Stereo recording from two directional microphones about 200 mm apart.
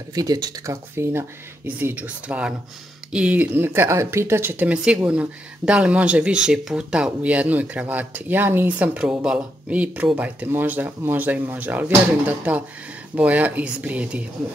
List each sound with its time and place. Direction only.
0.1 s speech: 20° right (ahead or behind)